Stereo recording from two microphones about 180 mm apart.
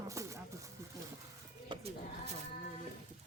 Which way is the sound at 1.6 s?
30° right (ahead or behind).